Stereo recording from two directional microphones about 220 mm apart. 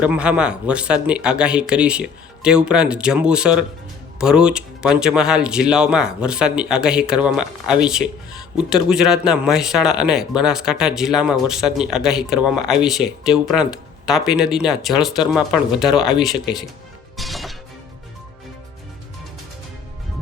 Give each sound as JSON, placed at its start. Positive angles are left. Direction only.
{"t": 0.0, "sound": "speech", "side_deg": -5}
{"t": 17.2, "sound": "music", "side_deg": 0}